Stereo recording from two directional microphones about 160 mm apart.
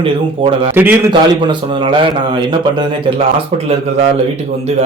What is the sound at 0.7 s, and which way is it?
Speech, 15° right (ahead or behind).